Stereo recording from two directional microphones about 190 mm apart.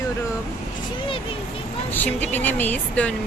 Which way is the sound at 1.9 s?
10° left (ahead or behind).